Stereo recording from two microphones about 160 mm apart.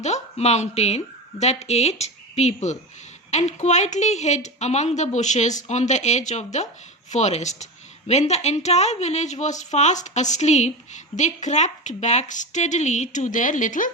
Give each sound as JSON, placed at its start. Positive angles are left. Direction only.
{"t": 0.0, "sound": "a woman's voice", "side_deg": 45}